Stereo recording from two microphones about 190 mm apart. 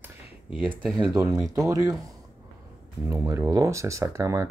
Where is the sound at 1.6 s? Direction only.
15° right (ahead or behind).